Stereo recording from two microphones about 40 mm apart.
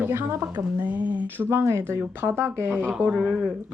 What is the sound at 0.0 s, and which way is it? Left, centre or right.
Speech, right.